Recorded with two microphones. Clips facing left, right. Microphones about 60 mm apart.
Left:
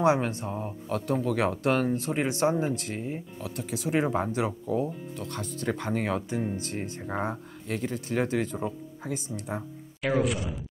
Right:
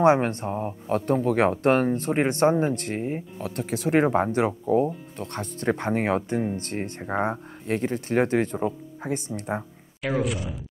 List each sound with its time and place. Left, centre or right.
0.0 s speech: right
0.5 s speech: right
3.5 s speech: right
7.0 s speech: right
10.0 s speech: centre